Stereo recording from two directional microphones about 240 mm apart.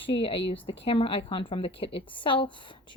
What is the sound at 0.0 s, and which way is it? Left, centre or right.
A woman's voice, left.